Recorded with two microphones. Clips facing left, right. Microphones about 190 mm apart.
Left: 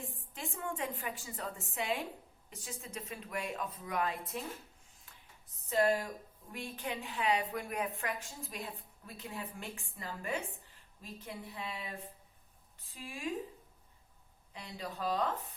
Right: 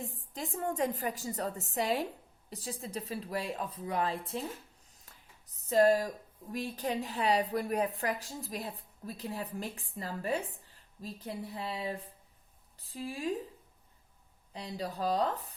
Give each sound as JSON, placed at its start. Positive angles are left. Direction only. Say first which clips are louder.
{"t": 0.3, "sound": "a woman's voice", "louder": "right 6 dB", "side_deg": -40}
{"t": 5.1, "sound": "a sound", "louder": "right 1 dB", "side_deg": -40}
{"t": 5.6, "sound": "a woman's voice", "louder": "right 5 dB", "side_deg": -40}
{"t": 14.5, "sound": "a woman's voice", "louder": "right 5 dB", "side_deg": -35}